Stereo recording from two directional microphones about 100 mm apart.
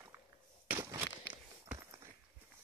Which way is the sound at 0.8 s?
30° right (ahead or behind).